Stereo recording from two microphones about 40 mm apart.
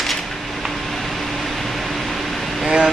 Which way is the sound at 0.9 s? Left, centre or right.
Centre.